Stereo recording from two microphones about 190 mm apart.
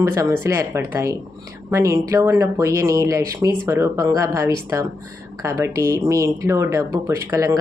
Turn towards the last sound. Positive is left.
turn(degrees=-15)  # may be behind; listen again after turning